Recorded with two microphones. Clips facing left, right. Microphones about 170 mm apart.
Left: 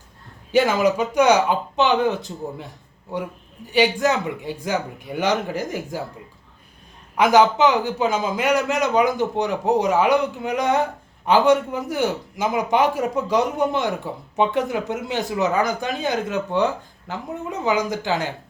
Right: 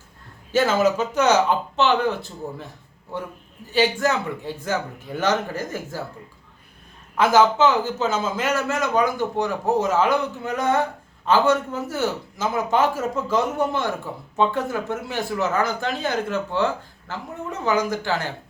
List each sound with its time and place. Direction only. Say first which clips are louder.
0.5 s a man's voice: left 1 dB; 15° left (ahead or behind)
3.7 s a man's voice: left 2 dB; 15° left (ahead or behind)
7.2 s a man's voice: left 1 dB; 15° left (ahead or behind)